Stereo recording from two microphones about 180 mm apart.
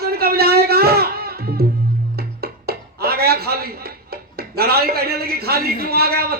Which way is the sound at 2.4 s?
60° right (ahead or behind).